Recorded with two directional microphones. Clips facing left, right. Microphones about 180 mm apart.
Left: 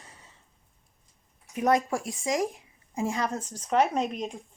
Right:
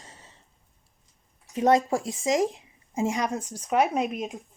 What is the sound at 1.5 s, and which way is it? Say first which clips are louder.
A woman's voice: right 3 dB; 25° right (ahead or behind).